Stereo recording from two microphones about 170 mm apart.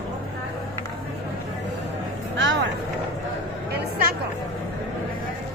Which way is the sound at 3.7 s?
65° right (ahead or behind).